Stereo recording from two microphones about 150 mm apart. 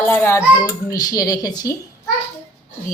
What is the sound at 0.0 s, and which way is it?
A child's voice, 15° left (ahead or behind).